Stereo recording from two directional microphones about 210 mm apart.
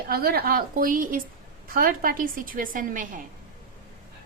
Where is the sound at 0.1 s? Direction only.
45° right (ahead or behind).